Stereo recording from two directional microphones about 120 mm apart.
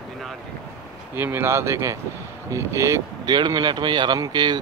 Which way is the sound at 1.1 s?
20° right (ahead or behind).